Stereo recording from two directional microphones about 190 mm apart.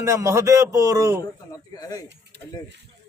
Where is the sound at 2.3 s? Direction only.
60° right (ahead or behind).